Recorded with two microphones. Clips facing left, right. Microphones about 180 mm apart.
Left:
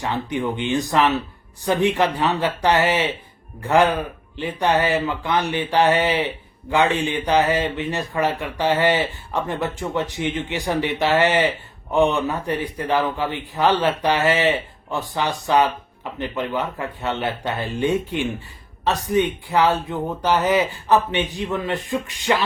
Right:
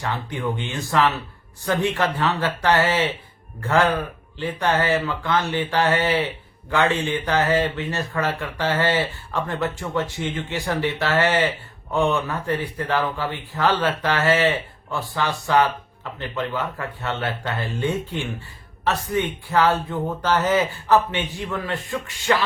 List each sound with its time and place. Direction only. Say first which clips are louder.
0.0 s speech: left 3 dB; 20° left (ahead or behind)
19.0 s speech: left 4 dB; 15° left (ahead or behind)